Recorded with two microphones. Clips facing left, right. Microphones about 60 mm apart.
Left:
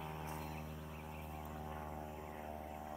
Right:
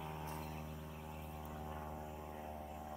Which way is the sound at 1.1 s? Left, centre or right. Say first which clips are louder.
Left 1 dB; centre.